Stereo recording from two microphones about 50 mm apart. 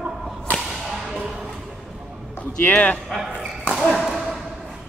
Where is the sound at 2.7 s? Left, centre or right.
Left.